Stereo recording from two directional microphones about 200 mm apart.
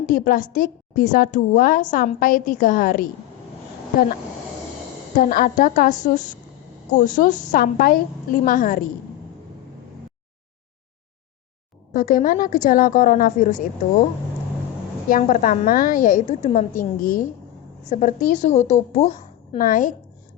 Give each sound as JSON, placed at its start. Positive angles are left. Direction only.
{"t": 0.0, "sound": "a woman's voice", "side_deg": 45}
{"t": 5.1, "sound": "a woman's voice", "side_deg": 45}
{"t": 11.9, "sound": "a woman's voice", "side_deg": 45}
{"t": 15.1, "sound": "a woman's voice", "side_deg": 45}
{"t": 16.2, "sound": "a woman's voice", "side_deg": 30}